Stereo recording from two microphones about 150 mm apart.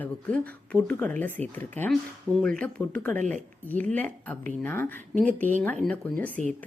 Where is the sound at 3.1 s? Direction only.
55° right (ahead or behind).